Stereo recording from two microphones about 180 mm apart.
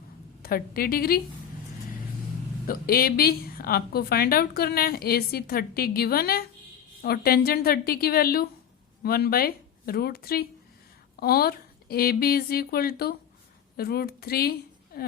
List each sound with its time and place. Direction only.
0.4 s a woman's voice: 55° left (ahead or behind)
2.6 s a woman's voice: 55° left (ahead or behind)